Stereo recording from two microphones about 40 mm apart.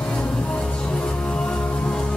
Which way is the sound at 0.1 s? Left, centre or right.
Left.